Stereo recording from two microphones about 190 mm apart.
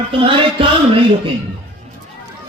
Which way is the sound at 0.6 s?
30° right (ahead or behind).